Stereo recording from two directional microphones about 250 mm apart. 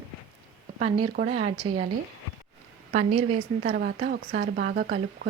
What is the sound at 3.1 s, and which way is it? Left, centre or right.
Speech, right.